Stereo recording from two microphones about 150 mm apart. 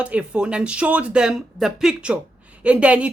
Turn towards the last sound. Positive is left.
turn(degrees=-10)  # may be behind; listen again after turning